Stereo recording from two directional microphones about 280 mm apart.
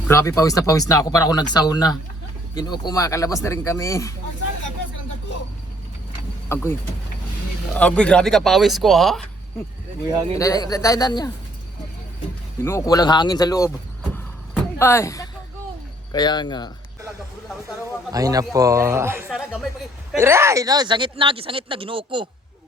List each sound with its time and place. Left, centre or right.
0.1 s speech: centre
6.5 s speech: centre
10.3 s speech: centre
12.6 s speech: centre
14.5 s a sound: centre
16.1 s speech: centre
18.1 s speech: centre